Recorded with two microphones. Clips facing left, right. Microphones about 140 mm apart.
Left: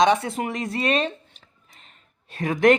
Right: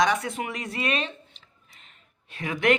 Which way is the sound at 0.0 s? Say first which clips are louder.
Left 5 dB; 25° left (ahead or behind).